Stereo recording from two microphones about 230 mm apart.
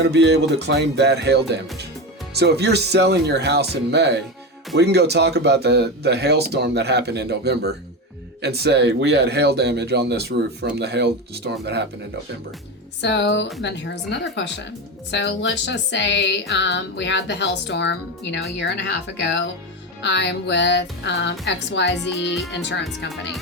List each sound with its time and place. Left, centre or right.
0.0 s speech: right
13.0 s speech: left